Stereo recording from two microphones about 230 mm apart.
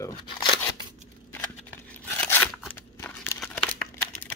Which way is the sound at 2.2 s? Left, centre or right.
Centre.